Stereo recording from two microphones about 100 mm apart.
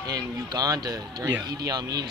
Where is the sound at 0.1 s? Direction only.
40° right (ahead or behind).